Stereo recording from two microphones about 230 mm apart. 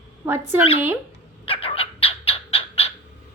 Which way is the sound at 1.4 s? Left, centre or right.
Left.